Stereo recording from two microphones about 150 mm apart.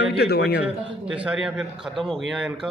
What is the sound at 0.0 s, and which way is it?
Speech, 90° left.